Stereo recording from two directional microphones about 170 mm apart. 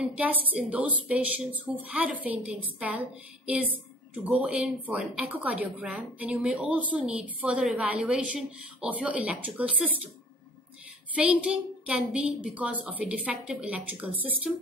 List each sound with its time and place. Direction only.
0.0 s speech: 10° right (ahead or behind)
4.1 s speech: 5° right (ahead or behind)
11.1 s speech: 5° right (ahead or behind)